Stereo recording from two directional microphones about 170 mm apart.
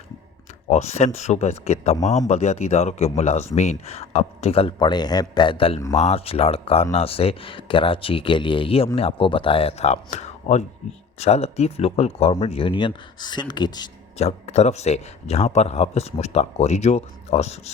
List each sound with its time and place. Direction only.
0.7 s a man's voice: 40° left (ahead or behind); by 13.9 s 25° left (ahead or behind)
14.2 s a man's voice: 40° left (ahead or behind)